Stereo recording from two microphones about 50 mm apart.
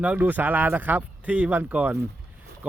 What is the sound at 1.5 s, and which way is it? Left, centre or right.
Speech, right.